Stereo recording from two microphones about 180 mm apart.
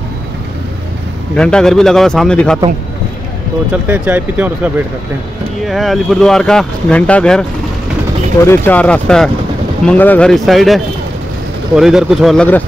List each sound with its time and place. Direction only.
1.3 s speech: 5° left (ahead or behind)
3.8 s speech: 10° right (ahead or behind); by 7.4 s 5° left (ahead or behind)
8.5 s speech: 10° left (ahead or behind)